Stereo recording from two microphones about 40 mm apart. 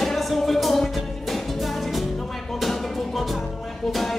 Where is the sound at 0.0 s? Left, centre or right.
Centre.